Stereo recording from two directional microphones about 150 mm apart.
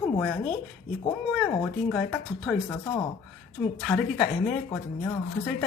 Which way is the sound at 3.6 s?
Centre (ahead or behind).